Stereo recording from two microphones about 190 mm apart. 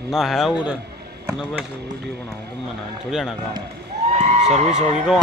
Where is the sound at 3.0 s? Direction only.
Centre (ahead or behind).